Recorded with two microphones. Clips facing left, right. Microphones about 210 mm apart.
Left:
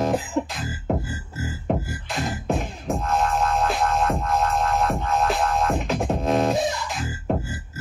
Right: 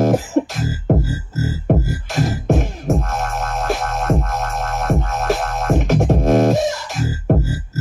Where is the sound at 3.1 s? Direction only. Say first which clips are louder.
Left 1 dB; 45° right (ahead or behind).